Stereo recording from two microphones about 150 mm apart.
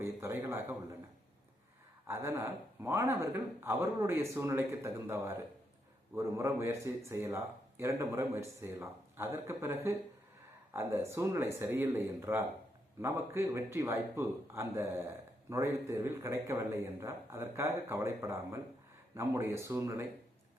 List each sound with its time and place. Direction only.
0.0 s a man's voice: 20° right (ahead or behind)
2.0 s a man's voice: 20° right (ahead or behind)